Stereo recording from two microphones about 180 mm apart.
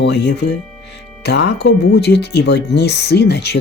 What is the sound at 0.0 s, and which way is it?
Speech, 65° left (ahead or behind).